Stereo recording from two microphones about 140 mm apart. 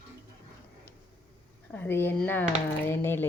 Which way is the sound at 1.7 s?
15° left (ahead or behind).